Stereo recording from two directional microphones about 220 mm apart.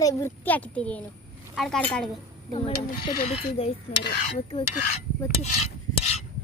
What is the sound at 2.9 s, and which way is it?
Speech, 40° left (ahead or behind).